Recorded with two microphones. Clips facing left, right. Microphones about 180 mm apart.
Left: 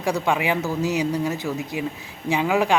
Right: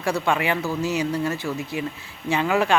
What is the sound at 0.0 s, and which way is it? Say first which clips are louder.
Speech: left 1 dB; 15° left (ahead or behind).